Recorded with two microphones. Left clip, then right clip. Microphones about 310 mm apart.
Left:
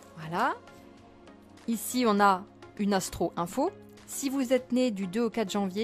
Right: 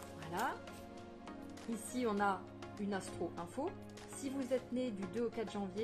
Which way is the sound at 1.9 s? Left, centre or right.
Left.